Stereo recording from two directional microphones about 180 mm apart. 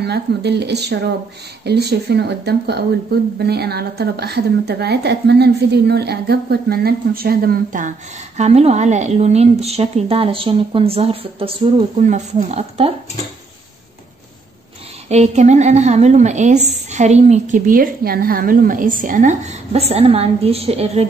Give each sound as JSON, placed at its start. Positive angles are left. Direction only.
{"t": 0.0, "sound": "speech", "side_deg": -65}
{"t": 8.4, "sound": "a woman's voice", "side_deg": -35}
{"t": 15.0, "sound": "a woman's voice", "side_deg": -40}